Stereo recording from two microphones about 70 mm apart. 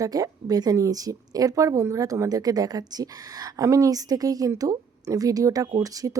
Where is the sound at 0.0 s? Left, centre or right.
Right.